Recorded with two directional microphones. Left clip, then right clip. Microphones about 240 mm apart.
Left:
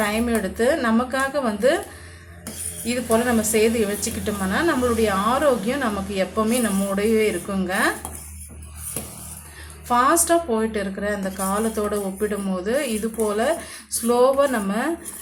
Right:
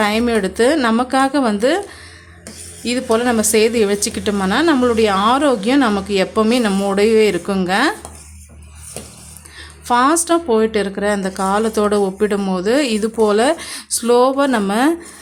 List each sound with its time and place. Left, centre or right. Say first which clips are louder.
0.0 s a woman's voice: right 6 dB; right
2.8 s a woman's voice: right 5 dB; right
9.8 s a woman's voice: right 4 dB; right